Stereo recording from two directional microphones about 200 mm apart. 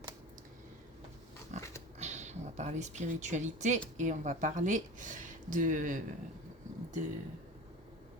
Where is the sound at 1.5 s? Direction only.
35° right (ahead or behind).